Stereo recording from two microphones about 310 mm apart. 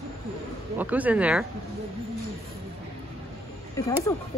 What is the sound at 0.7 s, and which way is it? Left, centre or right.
Speech, centre.